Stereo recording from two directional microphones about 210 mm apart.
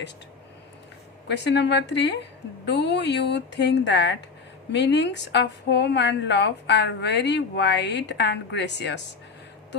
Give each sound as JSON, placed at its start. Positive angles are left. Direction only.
{"t": 1.3, "sound": "a woman's voice", "side_deg": 55}